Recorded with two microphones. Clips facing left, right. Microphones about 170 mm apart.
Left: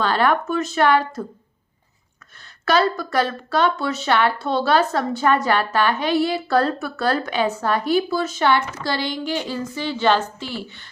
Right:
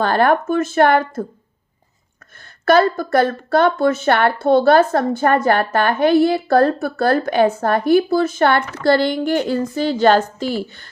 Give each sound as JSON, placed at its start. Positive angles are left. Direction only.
{"t": 0.0, "sound": "speech", "side_deg": -50}
{"t": 2.6, "sound": "speech", "side_deg": -50}